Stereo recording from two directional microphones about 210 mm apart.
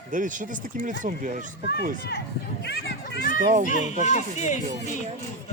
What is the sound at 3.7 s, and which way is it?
Speech, 35° left (ahead or behind).